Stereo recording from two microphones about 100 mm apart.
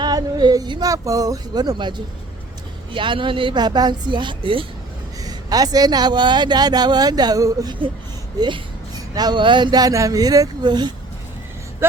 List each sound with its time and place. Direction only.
0.0 s speech: 45° right (ahead or behind)
2.9 s speech: 55° right (ahead or behind)
5.2 s speech: 40° right (ahead or behind)
11.8 s speech: 25° right (ahead or behind)